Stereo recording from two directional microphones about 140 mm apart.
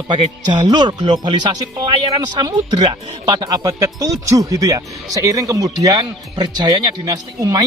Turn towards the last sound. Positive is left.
turn(degrees=-25)  # may be behind; listen again after turning